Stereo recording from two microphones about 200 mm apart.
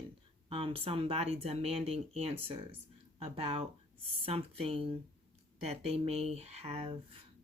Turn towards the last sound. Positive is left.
turn(degrees=-30)  # may be behind; listen again after turning